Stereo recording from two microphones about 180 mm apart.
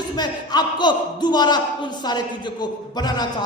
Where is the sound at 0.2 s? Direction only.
25° left (ahead or behind).